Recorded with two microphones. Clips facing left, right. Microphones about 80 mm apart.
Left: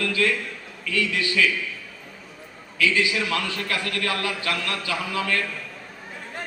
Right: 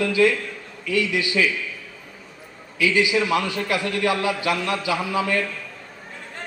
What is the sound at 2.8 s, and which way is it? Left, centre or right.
A man's voice, centre.